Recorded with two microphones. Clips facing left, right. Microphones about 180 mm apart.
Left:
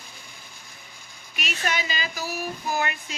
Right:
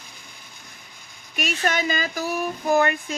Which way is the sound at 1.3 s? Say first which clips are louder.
Right 5 dB; 50° right (ahead or behind).